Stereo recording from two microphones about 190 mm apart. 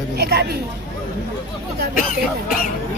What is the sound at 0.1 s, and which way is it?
Speech, 55° right (ahead or behind).